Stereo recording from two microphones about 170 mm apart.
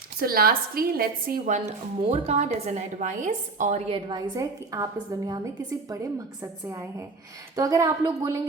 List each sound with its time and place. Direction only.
0.2 s a woman's voice: 60° right (ahead or behind); by 4.2 s 30° right (ahead or behind)
4.4 s a woman's voice: 20° right (ahead or behind)
6.4 s a woman's voice: 20° right (ahead or behind)